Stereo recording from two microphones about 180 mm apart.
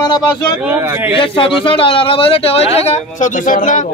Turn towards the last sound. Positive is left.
turn(degrees=45)  # may be behind; listen again after turning